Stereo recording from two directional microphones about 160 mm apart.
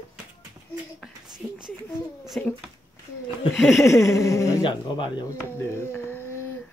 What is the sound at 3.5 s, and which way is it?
Speech, centre (ahead or behind).